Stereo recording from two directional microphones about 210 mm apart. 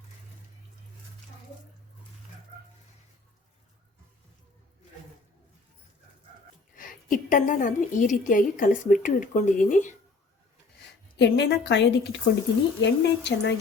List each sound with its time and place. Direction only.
6.7 s a woman's voice: 40° left (ahead or behind)
11.2 s a woman's voice: 55° left (ahead or behind)